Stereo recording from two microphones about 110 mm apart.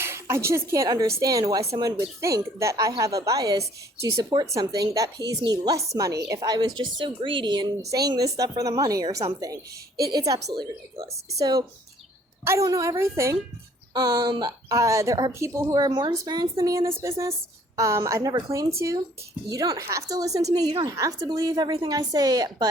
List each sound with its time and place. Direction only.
0.0 s speech: 20° right (ahead or behind); by 7.7 s 45° right (ahead or behind)
7.8 s a woman's voice: 35° right (ahead or behind)
13.9 s a woman's voice: 40° right (ahead or behind)
20.9 s a woman's voice: 30° right (ahead or behind)